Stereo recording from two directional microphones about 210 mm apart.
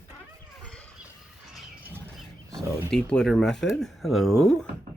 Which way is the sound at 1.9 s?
10° right (ahead or behind).